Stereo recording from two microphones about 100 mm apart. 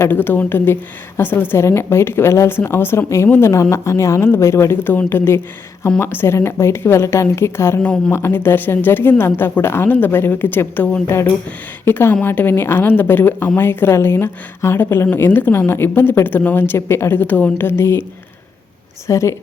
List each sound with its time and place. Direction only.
0.0 s a woman's voice: 20° left (ahead or behind)
19.0 s a woman's voice: 30° left (ahead or behind)